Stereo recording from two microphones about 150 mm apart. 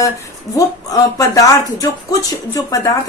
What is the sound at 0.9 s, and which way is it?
Speech, 25° left (ahead or behind).